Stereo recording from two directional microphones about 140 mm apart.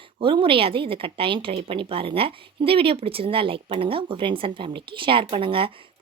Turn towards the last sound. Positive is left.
turn(degrees=-40)  # may be behind; listen again after turning